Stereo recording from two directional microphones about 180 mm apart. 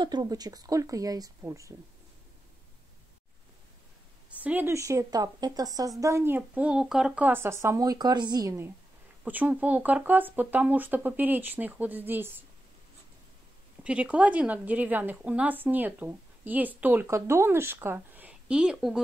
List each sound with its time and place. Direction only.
0.0 s speech: 20° right (ahead or behind)
4.4 s a woman's voice: 10° right (ahead or behind)
13.8 s a woman's voice: 5° right (ahead or behind)